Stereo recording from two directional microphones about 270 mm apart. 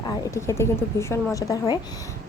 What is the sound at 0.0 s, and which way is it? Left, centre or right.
A woman's voice, centre.